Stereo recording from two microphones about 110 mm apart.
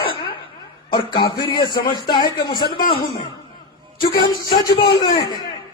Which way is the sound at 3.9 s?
40° left (ahead or behind).